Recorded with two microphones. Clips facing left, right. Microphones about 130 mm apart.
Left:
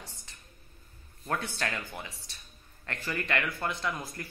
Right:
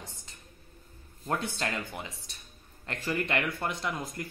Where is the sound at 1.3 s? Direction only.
25° right (ahead or behind).